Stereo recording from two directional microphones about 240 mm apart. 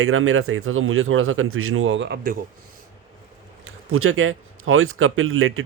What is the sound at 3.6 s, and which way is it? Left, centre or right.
Speech, right.